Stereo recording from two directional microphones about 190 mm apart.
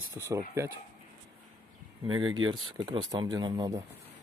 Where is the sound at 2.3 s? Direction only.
25° right (ahead or behind).